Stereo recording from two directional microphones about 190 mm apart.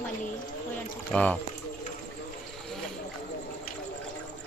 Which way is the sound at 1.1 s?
5° left (ahead or behind).